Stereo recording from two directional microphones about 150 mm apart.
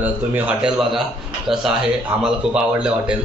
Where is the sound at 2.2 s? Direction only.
5° right (ahead or behind).